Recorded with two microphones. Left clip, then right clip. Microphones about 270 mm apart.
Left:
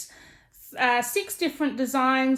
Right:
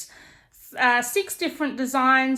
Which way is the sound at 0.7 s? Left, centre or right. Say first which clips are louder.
Right 2 dB; right.